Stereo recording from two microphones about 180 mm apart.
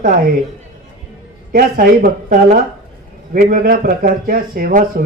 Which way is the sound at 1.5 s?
50° right (ahead or behind).